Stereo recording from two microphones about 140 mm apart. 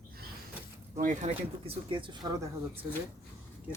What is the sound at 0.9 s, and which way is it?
Speech, 60° right (ahead or behind).